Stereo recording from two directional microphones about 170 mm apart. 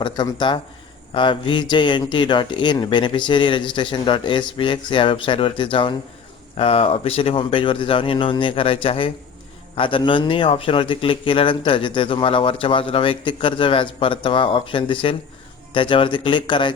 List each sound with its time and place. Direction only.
0.0 s a man's voice: 25° left (ahead or behind)